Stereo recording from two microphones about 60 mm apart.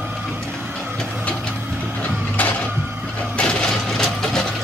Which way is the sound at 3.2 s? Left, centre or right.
Centre.